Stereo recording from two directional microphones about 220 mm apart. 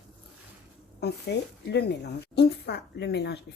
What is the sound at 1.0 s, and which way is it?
Speech, 50° left (ahead or behind).